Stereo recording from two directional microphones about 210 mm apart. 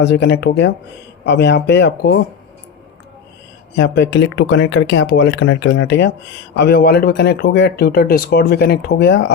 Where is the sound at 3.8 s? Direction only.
55° left (ahead or behind).